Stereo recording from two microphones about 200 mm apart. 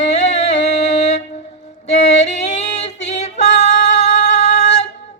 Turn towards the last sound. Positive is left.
turn(degrees=35)  # may be behind; listen again after turning